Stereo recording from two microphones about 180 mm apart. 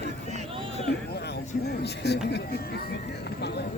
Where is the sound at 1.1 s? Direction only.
65° left (ahead or behind).